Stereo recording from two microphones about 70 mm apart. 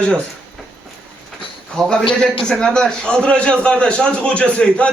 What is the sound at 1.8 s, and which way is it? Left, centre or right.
A man's voice, centre.